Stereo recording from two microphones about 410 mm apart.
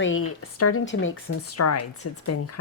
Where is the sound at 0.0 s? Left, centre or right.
Left.